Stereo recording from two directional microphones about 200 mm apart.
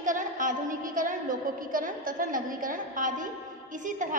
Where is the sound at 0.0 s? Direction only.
40° right (ahead or behind).